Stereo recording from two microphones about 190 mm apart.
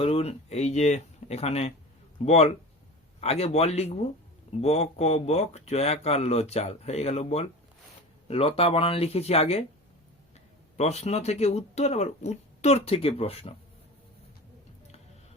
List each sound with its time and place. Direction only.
0.0 s speech: 30° left (ahead or behind)